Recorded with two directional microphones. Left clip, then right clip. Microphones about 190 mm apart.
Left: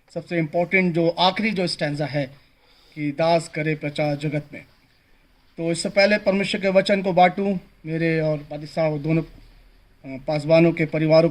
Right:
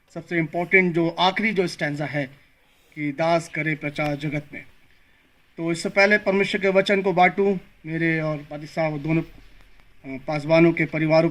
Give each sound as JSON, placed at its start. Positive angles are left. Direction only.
{"t": 0.1, "sound": "speech", "side_deg": 50}